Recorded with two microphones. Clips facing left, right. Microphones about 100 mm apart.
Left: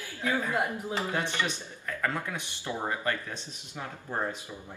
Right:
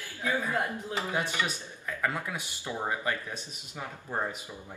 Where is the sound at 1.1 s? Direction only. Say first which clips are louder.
Right 2 dB; 10° right (ahead or behind).